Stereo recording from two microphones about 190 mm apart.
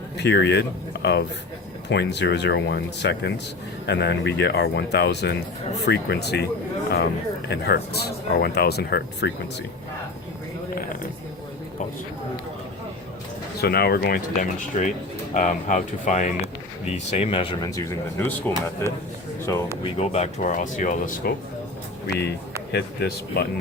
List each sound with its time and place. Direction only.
0.2 s speech: 65° left (ahead or behind)
1.9 s speech: 65° left (ahead or behind)
7.5 s speech: 60° left (ahead or behind)
13.6 s speech: 55° left (ahead or behind); by 19.7 s 15° left (ahead or behind)
19.7 s speech: 35° left (ahead or behind)
22.7 s speech: 60° left (ahead or behind)